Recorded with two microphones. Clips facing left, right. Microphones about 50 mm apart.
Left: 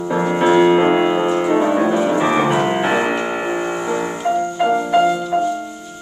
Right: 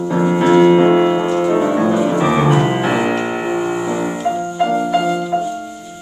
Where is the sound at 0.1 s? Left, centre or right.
Centre.